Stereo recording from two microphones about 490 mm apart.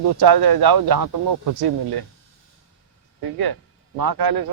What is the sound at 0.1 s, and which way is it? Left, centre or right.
A man's voice, right.